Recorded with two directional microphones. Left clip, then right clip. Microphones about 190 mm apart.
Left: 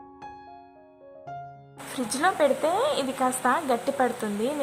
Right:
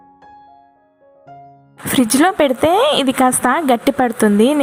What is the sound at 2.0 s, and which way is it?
Speech, 30° right (ahead or behind).